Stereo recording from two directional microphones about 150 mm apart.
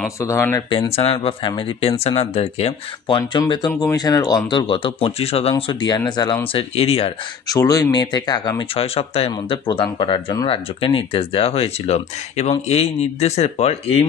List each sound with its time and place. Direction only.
0.2 s speech: 15° left (ahead or behind)
0.9 s speech: 35° left (ahead or behind)
3.2 s speech: 30° left (ahead or behind)
6.5 s speech: 40° left (ahead or behind)
7.4 s speech: 25° left (ahead or behind)
8.7 s speech: 40° left (ahead or behind)